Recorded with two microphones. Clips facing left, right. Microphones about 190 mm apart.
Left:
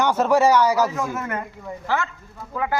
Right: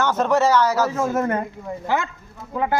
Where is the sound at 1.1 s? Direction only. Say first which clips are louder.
Right 6 dB; 35° right (ahead or behind).